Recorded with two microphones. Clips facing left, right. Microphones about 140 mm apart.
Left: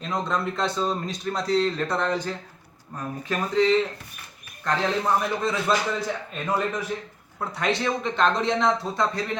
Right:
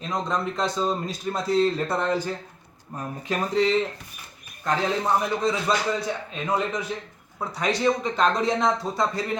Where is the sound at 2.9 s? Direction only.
20° right (ahead or behind).